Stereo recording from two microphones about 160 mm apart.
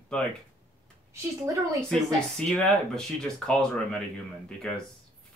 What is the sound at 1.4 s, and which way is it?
Speech, 20° right (ahead or behind).